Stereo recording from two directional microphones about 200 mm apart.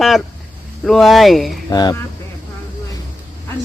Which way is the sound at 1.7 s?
20° left (ahead or behind).